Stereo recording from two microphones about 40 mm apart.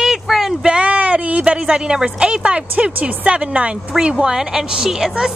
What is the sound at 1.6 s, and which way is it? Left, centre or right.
A woman's voice, centre.